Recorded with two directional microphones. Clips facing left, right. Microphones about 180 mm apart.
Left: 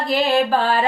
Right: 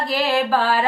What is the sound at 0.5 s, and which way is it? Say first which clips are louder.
Mantra: left 1 dB; 20° left (ahead or behind).